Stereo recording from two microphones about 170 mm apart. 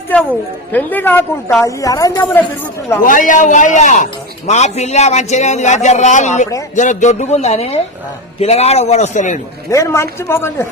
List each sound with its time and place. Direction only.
0.1 s a woman's voice: 10° left (ahead or behind)
3.0 s a man's voice: 50° left (ahead or behind)
9.6 s a woman's voice: 20° left (ahead or behind)